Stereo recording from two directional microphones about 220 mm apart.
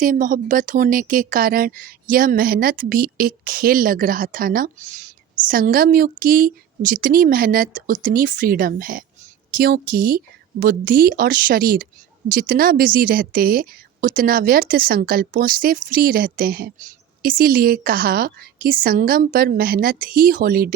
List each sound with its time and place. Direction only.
0.0 s speech: 35° right (ahead or behind)